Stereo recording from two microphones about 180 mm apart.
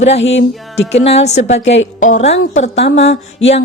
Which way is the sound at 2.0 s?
40° left (ahead or behind).